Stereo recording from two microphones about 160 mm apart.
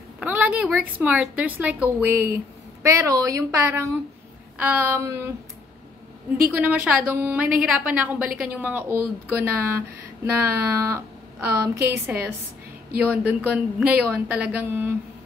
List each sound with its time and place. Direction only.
0.2 s a woman's voice: 10° right (ahead or behind)
6.5 s a woman's voice: 10° right (ahead or behind)